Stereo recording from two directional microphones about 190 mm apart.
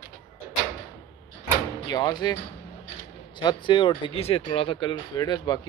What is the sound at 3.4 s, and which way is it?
Speech, 25° left (ahead or behind).